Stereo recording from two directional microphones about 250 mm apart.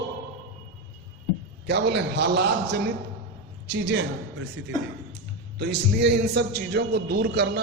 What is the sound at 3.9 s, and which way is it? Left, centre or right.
A man's voice, right.